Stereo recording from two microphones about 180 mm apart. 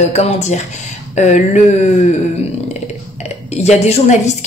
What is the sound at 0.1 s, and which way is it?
Speech, 40° left (ahead or behind).